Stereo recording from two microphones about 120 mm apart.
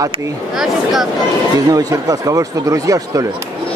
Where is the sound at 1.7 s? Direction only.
30° right (ahead or behind).